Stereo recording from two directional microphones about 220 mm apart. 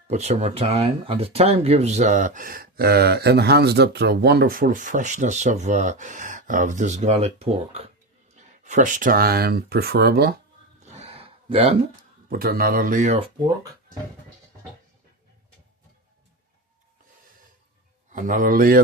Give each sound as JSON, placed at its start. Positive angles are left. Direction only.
{"t": 0.1, "sound": "speech", "side_deg": -30}
{"t": 10.8, "sound": "a sound", "side_deg": -30}
{"t": 12.3, "sound": "speech", "side_deg": -40}
{"t": 18.1, "sound": "speech", "side_deg": -35}